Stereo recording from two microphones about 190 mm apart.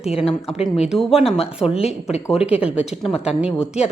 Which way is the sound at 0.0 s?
30° left (ahead or behind).